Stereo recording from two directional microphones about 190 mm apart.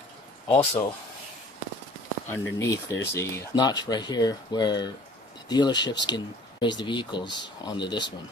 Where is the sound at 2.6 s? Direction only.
15° left (ahead or behind).